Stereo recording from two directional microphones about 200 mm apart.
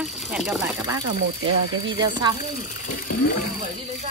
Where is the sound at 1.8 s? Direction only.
20° right (ahead or behind).